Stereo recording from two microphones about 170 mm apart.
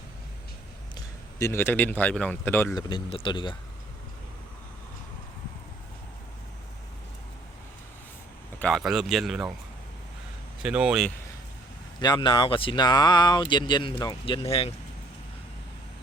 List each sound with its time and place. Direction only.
0.9 s speech: 15° left (ahead or behind)
2.7 s speech: 30° left (ahead or behind)
8.5 s speech: 5° left (ahead or behind)
10.6 s speech: 5° right (ahead or behind)
11.9 s speech: 25° left (ahead or behind)
14.4 s speech: 35° left (ahead or behind)